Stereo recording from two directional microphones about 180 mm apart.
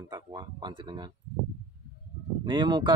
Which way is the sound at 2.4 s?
25° right (ahead or behind).